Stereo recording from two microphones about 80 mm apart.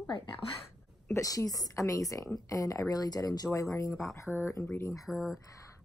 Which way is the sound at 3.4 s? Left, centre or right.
Left.